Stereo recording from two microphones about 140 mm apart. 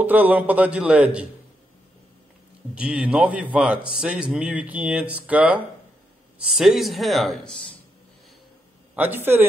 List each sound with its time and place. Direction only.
0.0 s speech: 10° right (ahead or behind)
2.7 s speech: 10° right (ahead or behind)
8.9 s speech: 15° right (ahead or behind)